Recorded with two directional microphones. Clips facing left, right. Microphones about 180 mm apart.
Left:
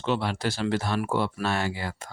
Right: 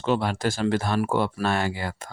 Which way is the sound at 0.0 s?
45° right (ahead or behind).